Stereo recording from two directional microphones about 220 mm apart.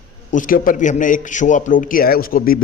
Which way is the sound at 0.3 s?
35° left (ahead or behind).